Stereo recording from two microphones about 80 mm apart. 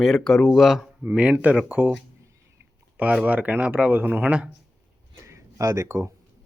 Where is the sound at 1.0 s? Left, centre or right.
Centre.